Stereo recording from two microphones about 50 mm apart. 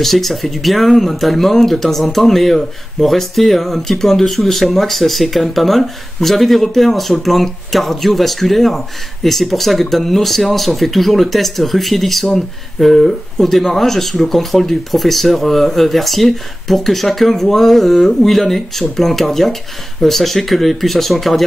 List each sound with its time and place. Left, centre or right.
0.0 s speech: centre